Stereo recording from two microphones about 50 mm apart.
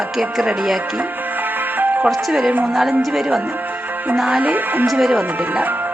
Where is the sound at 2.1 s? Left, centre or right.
Centre.